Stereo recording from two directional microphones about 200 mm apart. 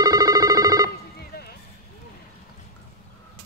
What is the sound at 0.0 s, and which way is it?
Telephone bell ringing, 20° right (ahead or behind).